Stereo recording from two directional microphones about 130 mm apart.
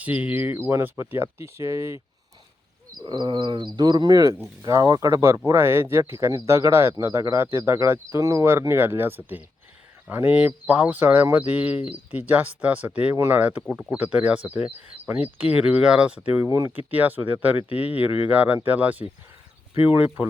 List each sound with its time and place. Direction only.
0.0 s speech: 10° right (ahead or behind)
3.0 s speech: 35° right (ahead or behind); by 16.5 s 10° right (ahead or behind)
16.5 s speech: 20° right (ahead or behind)